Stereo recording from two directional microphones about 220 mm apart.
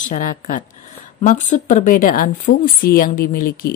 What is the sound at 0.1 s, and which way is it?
Speech, 35° left (ahead or behind).